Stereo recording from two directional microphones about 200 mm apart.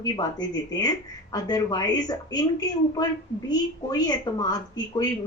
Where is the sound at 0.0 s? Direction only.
20° left (ahead or behind).